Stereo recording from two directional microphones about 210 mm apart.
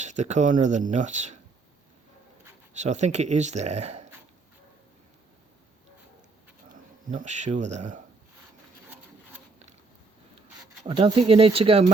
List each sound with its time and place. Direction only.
0.0 s speech: 35° right (ahead or behind)
2.7 s speech: 35° right (ahead or behind)
7.1 s speech: 35° right (ahead or behind)
10.8 s speech: 25° right (ahead or behind)